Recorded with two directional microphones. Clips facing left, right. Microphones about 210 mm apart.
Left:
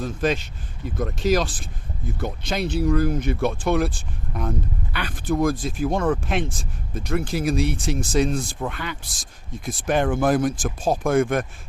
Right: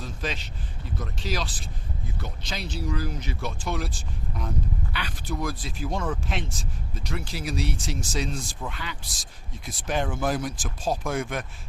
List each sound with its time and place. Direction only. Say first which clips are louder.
0.0 s speech: left 10 dB; 50° left (ahead or behind)